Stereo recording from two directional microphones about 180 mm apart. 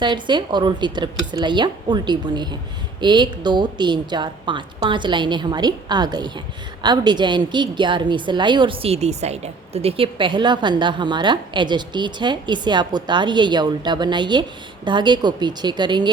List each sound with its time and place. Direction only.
0.0 s a woman's voice: 25° right (ahead or behind)